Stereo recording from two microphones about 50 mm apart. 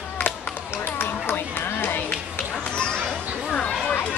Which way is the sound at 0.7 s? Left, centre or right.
Left.